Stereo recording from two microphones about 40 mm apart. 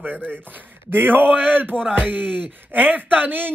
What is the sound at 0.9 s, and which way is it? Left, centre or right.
Speech, right.